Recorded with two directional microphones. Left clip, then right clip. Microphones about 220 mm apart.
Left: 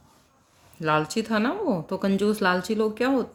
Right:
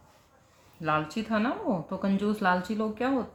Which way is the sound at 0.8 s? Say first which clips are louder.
Left 5 dB; 50° left (ahead or behind).